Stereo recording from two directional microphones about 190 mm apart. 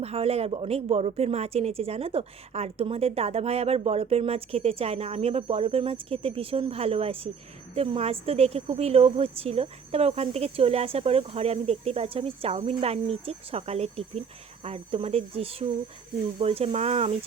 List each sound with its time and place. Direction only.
0.0 s a woman's voice: 30° right (ahead or behind)